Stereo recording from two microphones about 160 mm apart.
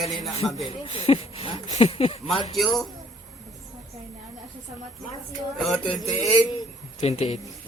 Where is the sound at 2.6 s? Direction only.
Centre (ahead or behind).